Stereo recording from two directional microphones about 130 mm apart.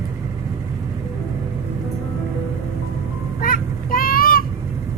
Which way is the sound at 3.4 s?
90° left.